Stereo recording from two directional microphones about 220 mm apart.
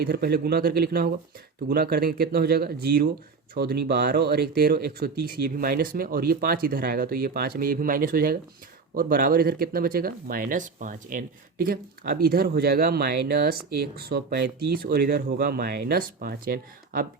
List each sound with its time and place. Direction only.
0.0 s speech: 45° right (ahead or behind)